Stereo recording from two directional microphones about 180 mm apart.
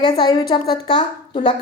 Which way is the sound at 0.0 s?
25° left (ahead or behind).